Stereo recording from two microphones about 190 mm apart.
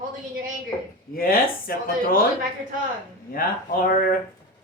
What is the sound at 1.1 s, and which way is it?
Speech, 50° left (ahead or behind).